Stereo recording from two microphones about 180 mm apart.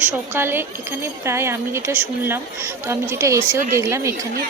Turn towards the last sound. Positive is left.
turn(degrees=-15)  # may be behind; listen again after turning